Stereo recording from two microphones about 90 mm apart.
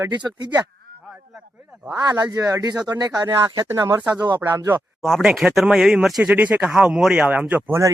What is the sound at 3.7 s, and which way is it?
Speech, 40° right (ahead or behind).